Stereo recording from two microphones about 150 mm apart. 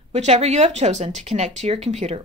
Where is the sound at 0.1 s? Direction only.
45° right (ahead or behind).